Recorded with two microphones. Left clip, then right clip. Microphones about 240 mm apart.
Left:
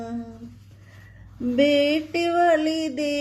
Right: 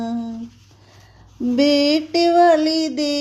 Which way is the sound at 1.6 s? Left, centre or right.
Right.